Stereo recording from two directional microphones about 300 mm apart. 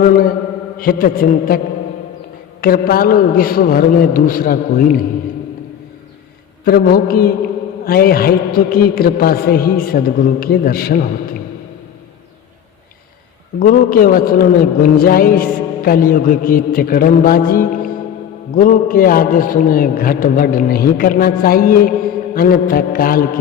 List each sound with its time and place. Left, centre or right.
0.0 s a man's voice: left
6.7 s a man's voice: left
13.6 s a man's voice: left